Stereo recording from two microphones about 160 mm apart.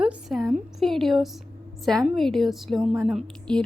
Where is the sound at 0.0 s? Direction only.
5° right (ahead or behind).